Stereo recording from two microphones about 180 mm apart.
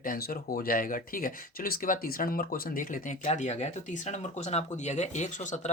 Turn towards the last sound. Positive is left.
turn(degrees=40)  # may be behind; listen again after turning